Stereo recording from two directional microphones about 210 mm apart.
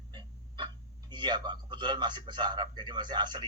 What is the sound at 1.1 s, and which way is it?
A man's voice, 20° right (ahead or behind).